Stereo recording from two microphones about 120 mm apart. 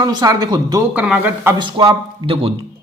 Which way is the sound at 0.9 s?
15° right (ahead or behind).